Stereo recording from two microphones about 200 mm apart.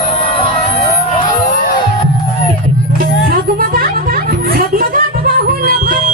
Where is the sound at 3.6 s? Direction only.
45° right (ahead or behind).